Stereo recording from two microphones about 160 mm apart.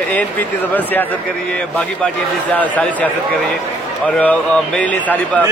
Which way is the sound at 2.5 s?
10° left (ahead or behind).